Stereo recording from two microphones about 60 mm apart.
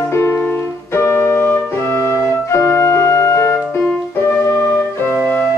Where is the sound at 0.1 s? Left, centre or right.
Left.